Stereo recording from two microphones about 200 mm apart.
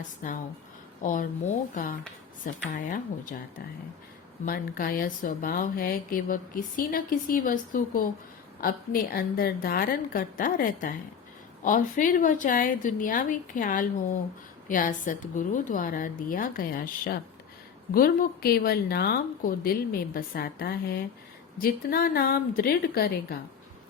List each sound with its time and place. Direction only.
0.2 s speech: 40° left (ahead or behind)
4.4 s speech: 45° left (ahead or behind)